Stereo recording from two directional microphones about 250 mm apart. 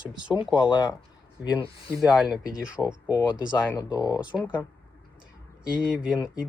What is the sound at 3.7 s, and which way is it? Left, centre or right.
Speech, centre.